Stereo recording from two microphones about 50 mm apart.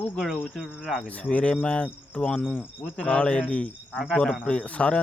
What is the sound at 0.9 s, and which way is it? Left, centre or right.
Speech, left.